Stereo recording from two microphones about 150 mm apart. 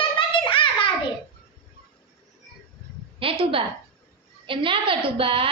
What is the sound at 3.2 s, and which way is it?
A woman's voice, 35° right (ahead or behind).